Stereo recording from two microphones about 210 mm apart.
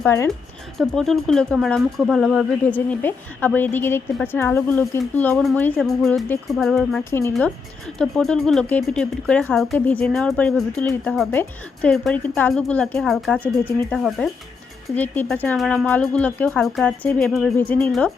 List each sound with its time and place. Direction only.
0.0 s speech: 10° left (ahead or behind)
0.8 s speech: centre (ahead or behind)
7.0 s speech: 10° left (ahead or behind)